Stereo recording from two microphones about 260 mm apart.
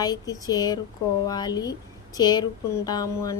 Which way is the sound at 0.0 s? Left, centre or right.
Centre.